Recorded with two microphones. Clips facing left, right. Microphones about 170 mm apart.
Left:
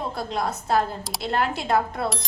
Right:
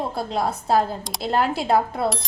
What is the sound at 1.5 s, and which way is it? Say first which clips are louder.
Speech: right 3 dB; 30° right (ahead or behind).